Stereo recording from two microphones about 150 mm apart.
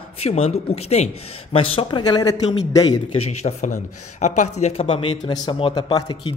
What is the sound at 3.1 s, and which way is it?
A man's voice, 50° left (ahead or behind).